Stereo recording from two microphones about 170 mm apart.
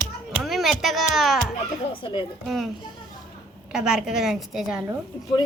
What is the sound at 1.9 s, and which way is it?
Speech, 30° left (ahead or behind).